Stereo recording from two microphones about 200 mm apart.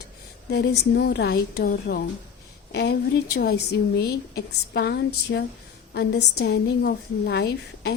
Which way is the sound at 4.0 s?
50° left (ahead or behind).